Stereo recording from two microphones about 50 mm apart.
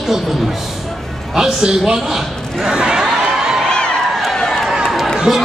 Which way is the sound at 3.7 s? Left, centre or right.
Centre.